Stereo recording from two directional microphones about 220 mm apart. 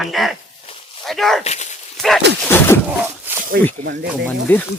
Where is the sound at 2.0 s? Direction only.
Centre (ahead or behind).